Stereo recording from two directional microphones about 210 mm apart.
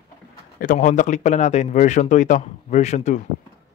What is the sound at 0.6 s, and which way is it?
Speech, 40° left (ahead or behind).